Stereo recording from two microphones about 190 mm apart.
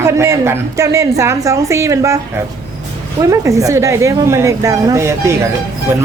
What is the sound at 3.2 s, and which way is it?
A woman's voice, 15° right (ahead or behind).